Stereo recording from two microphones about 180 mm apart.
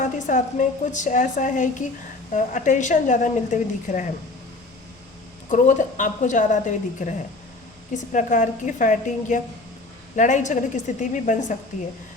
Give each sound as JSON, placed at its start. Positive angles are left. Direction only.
{"t": 0.0, "sound": "a woman's voice", "side_deg": 45}
{"t": 5.5, "sound": "a woman's voice", "side_deg": 45}
{"t": 8.1, "sound": "a woman's voice", "side_deg": 45}